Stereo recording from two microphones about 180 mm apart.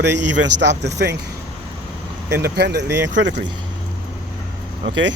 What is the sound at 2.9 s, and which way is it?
Speech, 15° right (ahead or behind).